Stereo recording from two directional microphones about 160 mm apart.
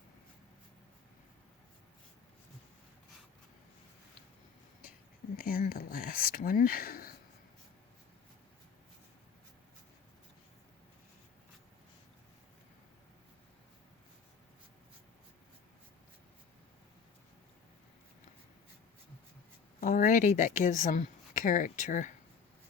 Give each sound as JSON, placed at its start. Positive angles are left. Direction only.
{"t": 5.4, "sound": "speech", "side_deg": 65}
{"t": 19.8, "sound": "speech", "side_deg": 55}